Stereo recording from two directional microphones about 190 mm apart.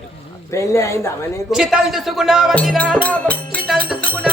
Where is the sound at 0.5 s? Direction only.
15° left (ahead or behind).